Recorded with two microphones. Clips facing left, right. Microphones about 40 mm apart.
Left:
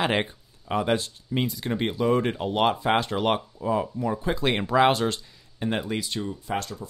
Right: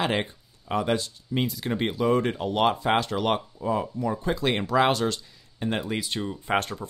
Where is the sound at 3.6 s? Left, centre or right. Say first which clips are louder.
Left 1 dB; centre.